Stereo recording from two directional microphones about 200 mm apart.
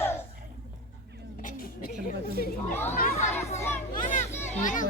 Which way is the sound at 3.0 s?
45° left (ahead or behind).